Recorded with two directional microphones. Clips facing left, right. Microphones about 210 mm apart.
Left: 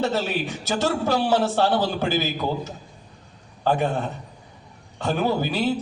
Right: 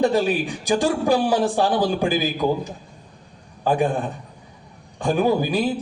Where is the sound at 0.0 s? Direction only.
15° right (ahead or behind).